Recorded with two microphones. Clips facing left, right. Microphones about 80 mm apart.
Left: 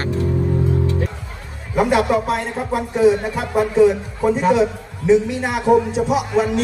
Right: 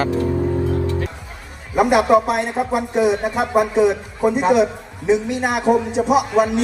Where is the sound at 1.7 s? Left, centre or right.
Centre.